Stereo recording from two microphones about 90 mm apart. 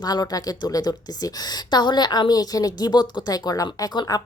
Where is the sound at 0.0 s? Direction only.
50° left (ahead or behind).